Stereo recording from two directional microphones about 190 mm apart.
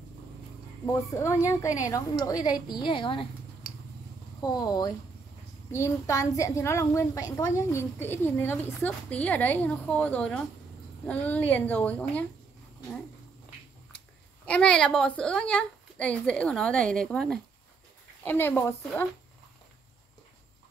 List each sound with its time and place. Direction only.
1.1 s a woman's voice: 15° left (ahead or behind)
4.4 s a woman's voice: 20° left (ahead or behind)
14.4 s a woman's voice: 5° left (ahead or behind)